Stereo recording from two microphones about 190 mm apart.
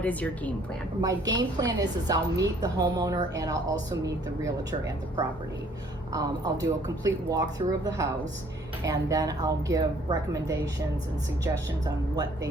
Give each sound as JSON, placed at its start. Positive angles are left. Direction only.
{"t": 0.0, "sound": "a woman's voice", "side_deg": 10}
{"t": 1.0, "sound": "a woman's voice", "side_deg": -20}
{"t": 6.1, "sound": "a woman's voice", "side_deg": -20}